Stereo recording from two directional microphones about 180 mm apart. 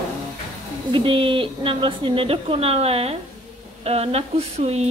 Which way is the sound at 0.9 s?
30° right (ahead or behind).